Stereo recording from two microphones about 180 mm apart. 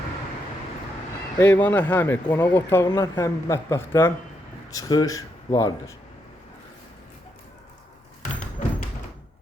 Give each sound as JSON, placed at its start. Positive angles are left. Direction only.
{"t": 1.4, "sound": "speech", "side_deg": 10}